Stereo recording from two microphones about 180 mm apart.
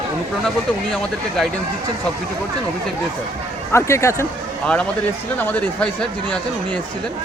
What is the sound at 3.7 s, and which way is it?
Speech, 15° left (ahead or behind).